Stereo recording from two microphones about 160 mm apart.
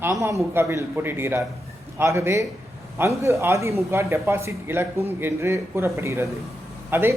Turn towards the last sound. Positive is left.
turn(degrees=-15)  # may be behind; listen again after turning